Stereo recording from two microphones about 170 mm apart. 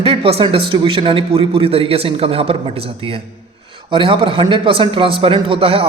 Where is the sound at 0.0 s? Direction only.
35° right (ahead or behind).